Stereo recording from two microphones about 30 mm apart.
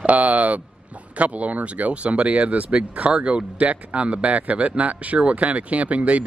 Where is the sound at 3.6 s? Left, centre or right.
Right.